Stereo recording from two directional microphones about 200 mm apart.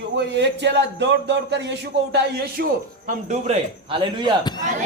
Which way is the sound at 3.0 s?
35° right (ahead or behind).